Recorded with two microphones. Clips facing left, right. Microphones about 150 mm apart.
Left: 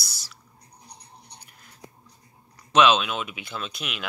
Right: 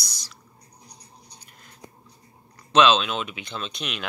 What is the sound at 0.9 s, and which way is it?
Toothbrush, 60° left (ahead or behind).